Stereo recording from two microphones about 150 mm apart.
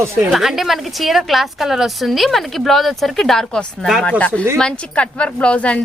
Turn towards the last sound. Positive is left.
turn(degrees=10)  # may be behind; listen again after turning